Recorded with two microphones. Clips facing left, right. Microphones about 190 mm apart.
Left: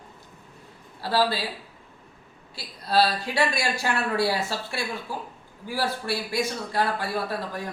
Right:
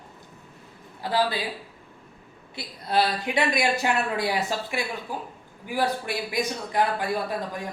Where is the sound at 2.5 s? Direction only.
20° right (ahead or behind).